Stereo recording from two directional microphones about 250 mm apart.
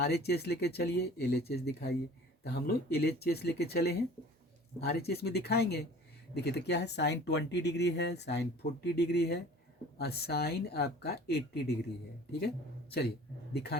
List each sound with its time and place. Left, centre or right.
0.0 s speech: left
13.5 s speech: left